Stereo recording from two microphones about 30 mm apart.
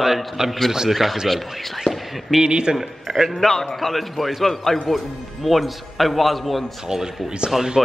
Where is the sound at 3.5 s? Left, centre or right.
Centre.